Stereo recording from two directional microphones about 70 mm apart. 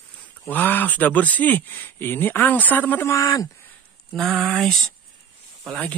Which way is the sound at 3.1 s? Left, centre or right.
Left.